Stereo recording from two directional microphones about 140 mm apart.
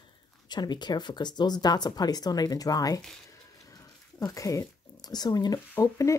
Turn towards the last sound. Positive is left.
turn(degrees=20)  # may be behind; listen again after turning